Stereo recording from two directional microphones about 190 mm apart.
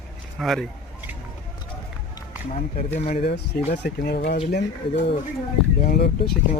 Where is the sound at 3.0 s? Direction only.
35° left (ahead or behind).